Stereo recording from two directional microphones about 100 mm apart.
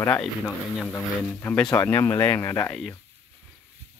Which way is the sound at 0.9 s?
15° left (ahead or behind).